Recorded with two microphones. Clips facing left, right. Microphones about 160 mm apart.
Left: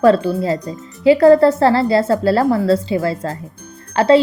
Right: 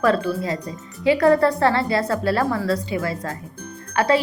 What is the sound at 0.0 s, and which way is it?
A woman's voice, 30° left (ahead or behind).